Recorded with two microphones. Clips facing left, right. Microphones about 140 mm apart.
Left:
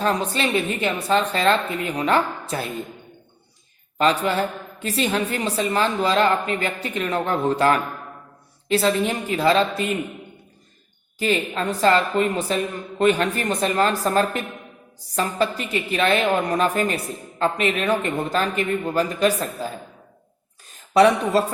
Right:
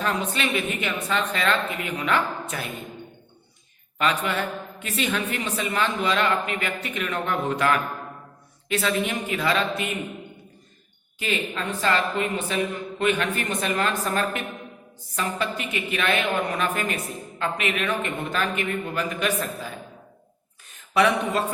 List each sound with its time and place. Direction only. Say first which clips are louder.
0.0 s a woman's voice: left 4 dB; 35° left (ahead or behind)
3.9 s a woman's voice: left 5 dB; 35° left (ahead or behind)
11.2 s a woman's voice: left 5 dB; 35° left (ahead or behind)
20.9 s a woman's voice: left 5 dB; 35° left (ahead or behind)